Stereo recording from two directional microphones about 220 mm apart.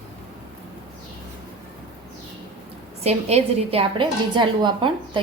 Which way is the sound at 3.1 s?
25° right (ahead or behind).